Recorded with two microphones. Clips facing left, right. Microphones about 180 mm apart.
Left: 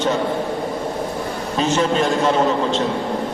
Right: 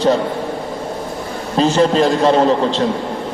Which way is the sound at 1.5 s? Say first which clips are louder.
Right 5 dB; 35° right (ahead or behind).